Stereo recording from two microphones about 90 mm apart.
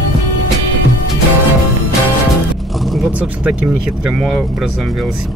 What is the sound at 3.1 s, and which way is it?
Speech, 15° right (ahead or behind).